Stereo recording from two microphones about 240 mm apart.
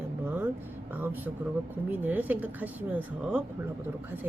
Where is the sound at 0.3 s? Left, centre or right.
Centre.